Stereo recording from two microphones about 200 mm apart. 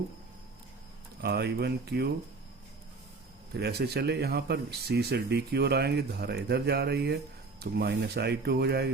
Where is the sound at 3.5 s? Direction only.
55° right (ahead or behind).